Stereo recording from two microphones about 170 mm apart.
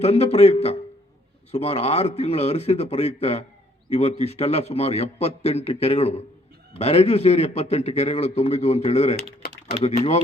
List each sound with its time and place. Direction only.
0.0 s a man's voice: 40° left (ahead or behind)